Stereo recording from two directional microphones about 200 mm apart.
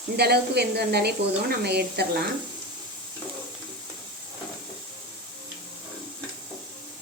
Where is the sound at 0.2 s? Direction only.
55° right (ahead or behind).